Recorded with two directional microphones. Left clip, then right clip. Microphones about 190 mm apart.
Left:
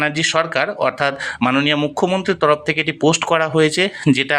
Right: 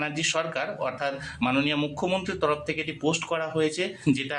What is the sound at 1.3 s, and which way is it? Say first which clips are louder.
Speech: left 8 dB; 30° left (ahead or behind).